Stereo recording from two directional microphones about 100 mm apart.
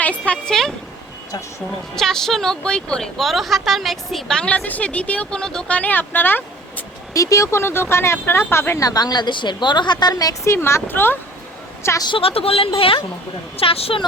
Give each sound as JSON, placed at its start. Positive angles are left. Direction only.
{"t": 0.0, "sound": "a sound", "side_deg": 15}
{"t": 2.0, "sound": "speech", "side_deg": 5}
{"t": 7.1, "sound": "speech", "side_deg": 35}
{"t": 8.9, "sound": "a woman's voice", "side_deg": 40}
{"t": 12.0, "sound": "speech", "side_deg": 65}